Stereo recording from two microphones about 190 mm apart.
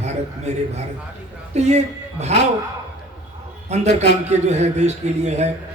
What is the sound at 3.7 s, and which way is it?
A man's voice, 35° right (ahead or behind).